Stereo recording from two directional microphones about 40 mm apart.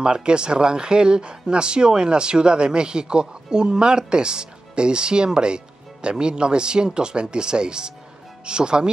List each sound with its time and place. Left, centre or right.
0.0 s speech: right